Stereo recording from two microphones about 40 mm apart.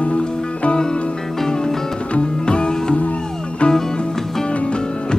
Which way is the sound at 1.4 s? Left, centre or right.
Centre.